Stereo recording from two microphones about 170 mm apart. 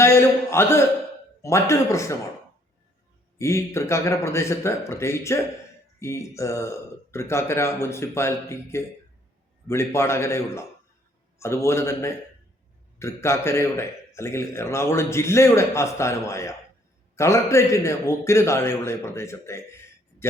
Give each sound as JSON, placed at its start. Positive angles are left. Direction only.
{"t": 0.0, "sound": "a man's voice", "side_deg": 15}
{"t": 3.3, "sound": "a man's voice", "side_deg": 15}